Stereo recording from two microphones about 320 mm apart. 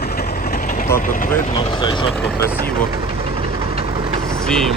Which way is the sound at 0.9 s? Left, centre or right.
Left.